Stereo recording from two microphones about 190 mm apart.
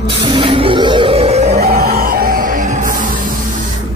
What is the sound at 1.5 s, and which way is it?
Music, 55° right (ahead or behind).